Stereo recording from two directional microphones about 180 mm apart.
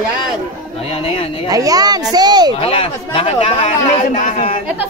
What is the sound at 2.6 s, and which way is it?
Speech, 30° left (ahead or behind).